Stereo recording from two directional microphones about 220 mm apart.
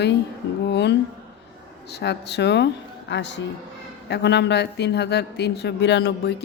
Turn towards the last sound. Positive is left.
turn(degrees=50)  # may be behind; listen again after turning